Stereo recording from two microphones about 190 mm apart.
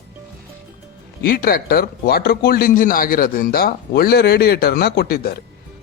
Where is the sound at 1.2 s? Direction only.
50° left (ahead or behind).